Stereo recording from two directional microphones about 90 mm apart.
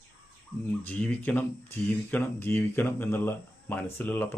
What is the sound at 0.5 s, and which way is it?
Speech, 35° left (ahead or behind).